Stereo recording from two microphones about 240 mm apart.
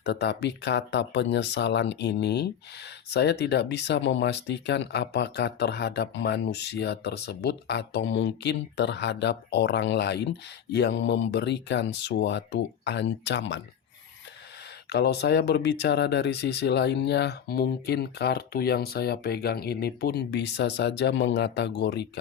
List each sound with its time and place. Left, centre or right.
0.0 s speech: left
14.8 s speech: left